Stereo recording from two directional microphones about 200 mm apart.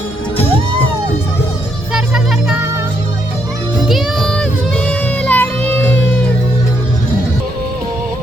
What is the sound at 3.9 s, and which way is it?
Music, centre (ahead or behind).